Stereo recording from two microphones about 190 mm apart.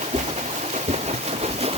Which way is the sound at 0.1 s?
35° right (ahead or behind).